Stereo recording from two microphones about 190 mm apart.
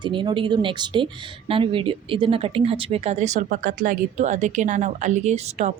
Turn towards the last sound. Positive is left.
turn(degrees=-35)  # may be behind; listen again after turning